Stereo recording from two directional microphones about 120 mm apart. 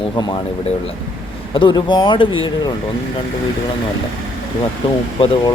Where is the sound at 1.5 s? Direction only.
40° left (ahead or behind).